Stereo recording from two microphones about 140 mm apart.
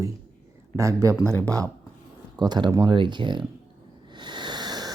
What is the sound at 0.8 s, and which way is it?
Speech, 20° right (ahead or behind).